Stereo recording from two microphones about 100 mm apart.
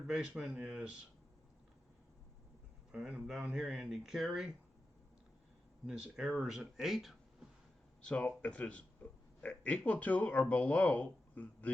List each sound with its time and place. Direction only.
0.1 s speech: 10° right (ahead or behind)
2.9 s speech: 10° right (ahead or behind)
5.8 s speech: 5° right (ahead or behind)
8.0 s speech: 10° left (ahead or behind)